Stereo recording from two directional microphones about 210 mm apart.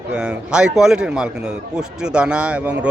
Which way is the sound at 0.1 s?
5° right (ahead or behind).